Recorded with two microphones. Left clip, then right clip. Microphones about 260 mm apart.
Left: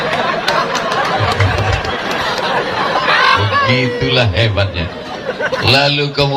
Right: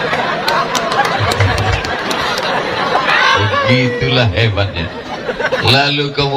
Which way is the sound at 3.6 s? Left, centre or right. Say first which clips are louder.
Right 1 dB; left.